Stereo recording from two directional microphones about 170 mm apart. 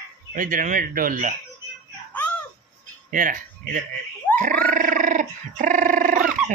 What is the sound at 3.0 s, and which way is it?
Speech, 55° right (ahead or behind).